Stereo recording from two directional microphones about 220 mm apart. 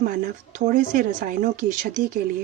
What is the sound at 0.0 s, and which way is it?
Speech, 35° right (ahead or behind).